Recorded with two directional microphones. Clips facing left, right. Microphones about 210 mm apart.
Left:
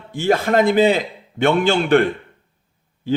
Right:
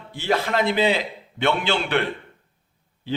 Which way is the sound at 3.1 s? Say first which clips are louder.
Left 7 dB; 45° left (ahead or behind).